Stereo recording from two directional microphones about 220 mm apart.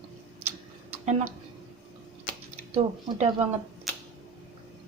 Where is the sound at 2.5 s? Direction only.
30° right (ahead or behind).